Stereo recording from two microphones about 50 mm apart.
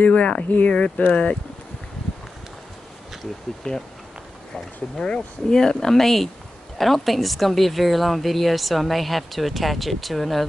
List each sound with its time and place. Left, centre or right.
0.0 s speech: left
3.6 s speech: centre
4.9 s a woman's voice: centre